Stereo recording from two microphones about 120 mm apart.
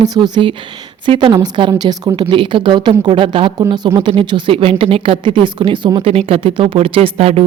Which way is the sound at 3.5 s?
35° right (ahead or behind).